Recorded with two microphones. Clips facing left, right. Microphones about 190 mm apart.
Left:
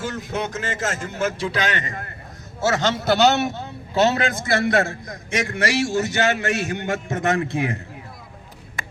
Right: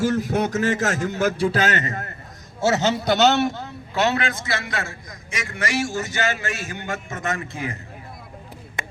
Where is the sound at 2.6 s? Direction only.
10° right (ahead or behind).